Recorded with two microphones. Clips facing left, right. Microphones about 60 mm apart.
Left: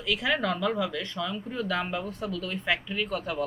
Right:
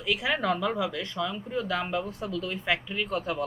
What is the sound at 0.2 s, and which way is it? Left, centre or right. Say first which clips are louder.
Speech: even; centre.